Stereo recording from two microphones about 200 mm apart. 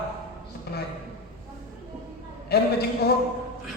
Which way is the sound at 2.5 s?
55° left (ahead or behind).